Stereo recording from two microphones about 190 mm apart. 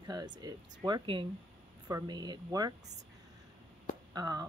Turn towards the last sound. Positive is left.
turn(degrees=-20)  # may be behind; listen again after turning